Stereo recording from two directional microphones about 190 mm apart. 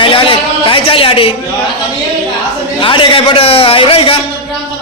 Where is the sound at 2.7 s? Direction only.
25° left (ahead or behind).